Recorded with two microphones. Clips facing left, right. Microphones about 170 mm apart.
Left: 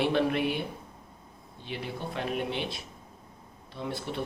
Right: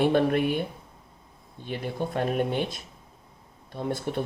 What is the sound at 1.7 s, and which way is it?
Speech, 45° right (ahead or behind).